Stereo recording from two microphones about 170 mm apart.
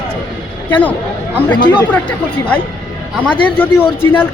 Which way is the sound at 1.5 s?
25° left (ahead or behind).